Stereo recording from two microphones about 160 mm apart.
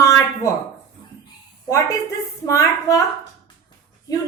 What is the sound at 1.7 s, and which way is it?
A woman's voice, 20° left (ahead or behind).